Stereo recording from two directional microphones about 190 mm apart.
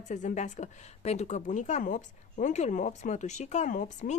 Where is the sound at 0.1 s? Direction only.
40° left (ahead or behind).